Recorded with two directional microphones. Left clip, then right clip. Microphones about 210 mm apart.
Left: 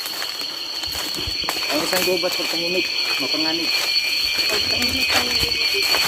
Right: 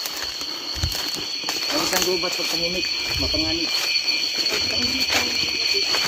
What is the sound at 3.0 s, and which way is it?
Speech, centre (ahead or behind).